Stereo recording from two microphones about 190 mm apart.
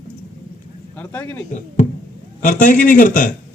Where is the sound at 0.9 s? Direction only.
10° left (ahead or behind).